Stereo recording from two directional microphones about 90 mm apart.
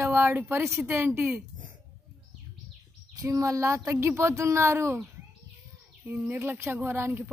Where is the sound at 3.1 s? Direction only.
40° right (ahead or behind).